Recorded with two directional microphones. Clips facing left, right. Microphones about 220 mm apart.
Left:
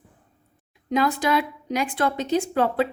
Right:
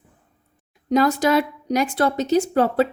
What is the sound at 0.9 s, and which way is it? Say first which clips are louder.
A woman's voice: right 4 dB; 40° right (ahead or behind).